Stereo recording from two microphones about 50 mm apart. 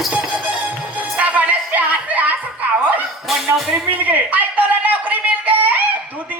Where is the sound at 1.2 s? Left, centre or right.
Right.